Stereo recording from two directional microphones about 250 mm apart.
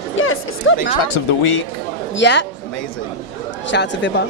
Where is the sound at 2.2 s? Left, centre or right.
Left.